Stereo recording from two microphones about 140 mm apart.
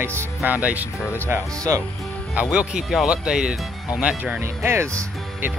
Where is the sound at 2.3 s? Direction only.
10° right (ahead or behind).